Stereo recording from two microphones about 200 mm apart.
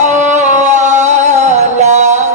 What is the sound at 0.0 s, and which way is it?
Music, 35° right (ahead or behind).